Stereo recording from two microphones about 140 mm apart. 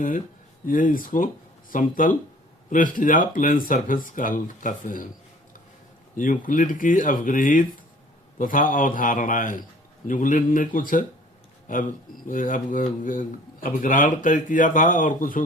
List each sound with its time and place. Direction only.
0.6 s speech: 75° left (ahead or behind)
6.1 s speech: 70° left (ahead or behind)